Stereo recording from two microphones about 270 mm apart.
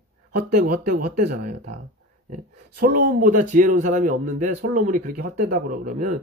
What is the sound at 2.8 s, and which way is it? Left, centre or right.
Speech, right.